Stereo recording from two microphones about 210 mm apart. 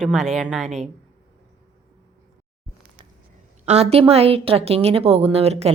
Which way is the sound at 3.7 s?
30° right (ahead or behind).